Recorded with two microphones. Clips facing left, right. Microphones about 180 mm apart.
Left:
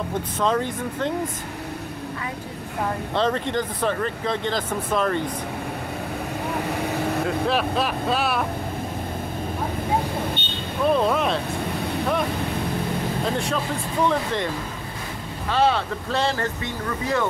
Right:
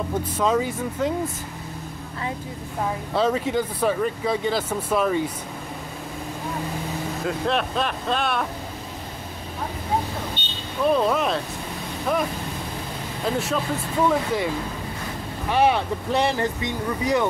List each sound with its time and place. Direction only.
0.4 s speech: 5° right (ahead or behind)
3.2 s speech: 5° right (ahead or behind)
7.2 s speech: 5° left (ahead or behind)
10.9 s speech: centre (ahead or behind)
14.0 s speech: 5° right (ahead or behind)
15.5 s speech: 15° right (ahead or behind)